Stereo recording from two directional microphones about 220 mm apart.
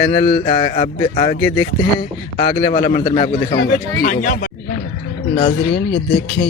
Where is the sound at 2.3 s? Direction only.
20° left (ahead or behind).